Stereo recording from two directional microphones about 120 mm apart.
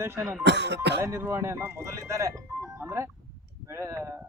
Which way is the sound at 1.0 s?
20° right (ahead or behind).